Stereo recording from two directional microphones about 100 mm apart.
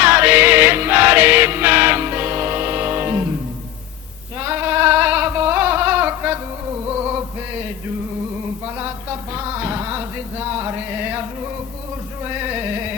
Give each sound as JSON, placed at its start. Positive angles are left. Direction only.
{"t": 0.0, "sound": "music", "side_deg": -20}
{"t": 4.4, "sound": "a sound", "side_deg": -20}
{"t": 8.6, "sound": "music", "side_deg": -25}